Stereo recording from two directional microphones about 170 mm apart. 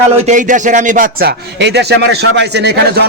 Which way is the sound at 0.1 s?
45° right (ahead or behind).